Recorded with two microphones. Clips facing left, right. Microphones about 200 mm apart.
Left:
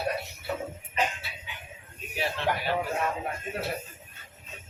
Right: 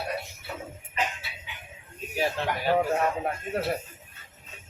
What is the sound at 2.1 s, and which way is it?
Speech, 45° right (ahead or behind).